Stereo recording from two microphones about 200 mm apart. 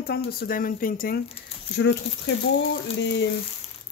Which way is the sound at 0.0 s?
50° left (ahead or behind).